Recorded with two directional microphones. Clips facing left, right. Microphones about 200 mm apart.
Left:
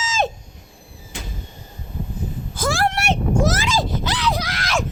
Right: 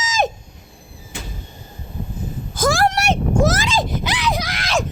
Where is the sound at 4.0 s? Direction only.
10° right (ahead or behind).